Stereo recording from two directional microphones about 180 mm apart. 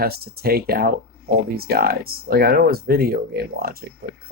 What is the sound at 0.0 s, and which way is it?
Speech, 60° right (ahead or behind).